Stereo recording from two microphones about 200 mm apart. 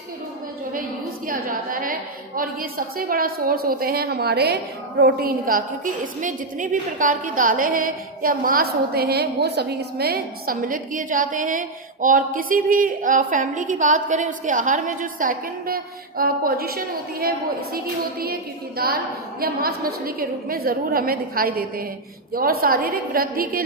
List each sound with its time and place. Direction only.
1.3 s a woman's voice: 45° right (ahead or behind)
19.4 s a woman's voice: 50° right (ahead or behind)